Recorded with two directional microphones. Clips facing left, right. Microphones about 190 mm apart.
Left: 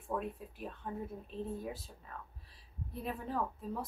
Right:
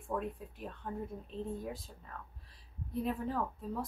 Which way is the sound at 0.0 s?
Centre (ahead or behind).